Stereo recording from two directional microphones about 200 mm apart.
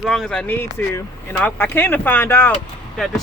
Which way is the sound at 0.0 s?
Centre (ahead or behind).